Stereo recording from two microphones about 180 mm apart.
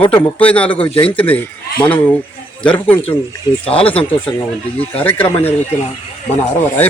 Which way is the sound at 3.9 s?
30° left (ahead or behind).